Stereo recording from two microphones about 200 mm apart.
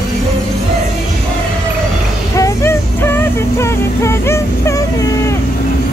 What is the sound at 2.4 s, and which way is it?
Music, 10° left (ahead or behind).